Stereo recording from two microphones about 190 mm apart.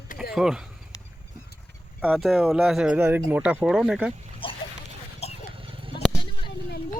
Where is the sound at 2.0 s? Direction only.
5° right (ahead or behind).